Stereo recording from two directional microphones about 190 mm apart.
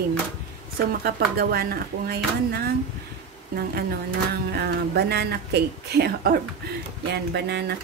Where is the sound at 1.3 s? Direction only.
55° right (ahead or behind).